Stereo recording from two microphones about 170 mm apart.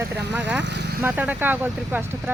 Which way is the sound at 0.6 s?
85° right.